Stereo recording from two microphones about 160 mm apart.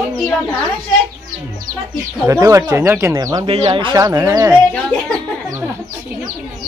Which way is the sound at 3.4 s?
35° right (ahead or behind).